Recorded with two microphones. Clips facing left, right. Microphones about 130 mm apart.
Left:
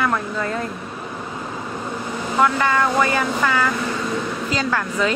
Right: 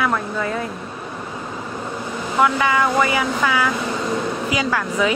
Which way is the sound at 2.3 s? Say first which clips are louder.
Right 1 dB; 10° right (ahead or behind).